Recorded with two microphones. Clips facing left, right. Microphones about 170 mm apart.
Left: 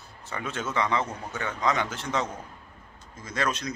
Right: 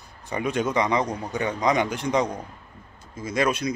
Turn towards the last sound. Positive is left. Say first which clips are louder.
# right 6 dB
turn(degrees=-10)  # may be behind; listen again after turning